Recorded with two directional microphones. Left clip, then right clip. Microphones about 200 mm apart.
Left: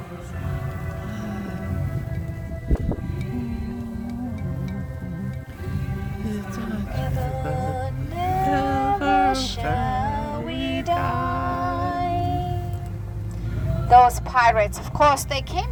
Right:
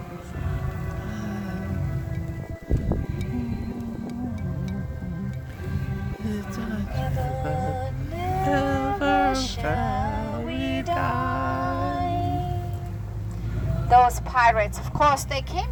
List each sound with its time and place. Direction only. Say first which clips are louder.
1.1 s music: left 1 dB; centre (ahead or behind)
6.2 s music: left 1 dB; centre (ahead or behind)
6.9 s music: even; 25° left (ahead or behind)
8.4 s a sound: right 1 dB; 5° right (ahead or behind)
9.0 s music: left 1 dB; 5° right (ahead or behind)
9.3 s music: left 2 dB; 30° left (ahead or behind)
9.6 s music: left 1 dB; 5° right (ahead or behind)
9.8 s music: left 2 dB; 35° left (ahead or behind)
10.5 s music: left 3 dB; 5° right (ahead or behind)
11.7 s music: left 2 dB; 40° left (ahead or behind)
13.8 s vehicle: left 3 dB; 45° left (ahead or behind)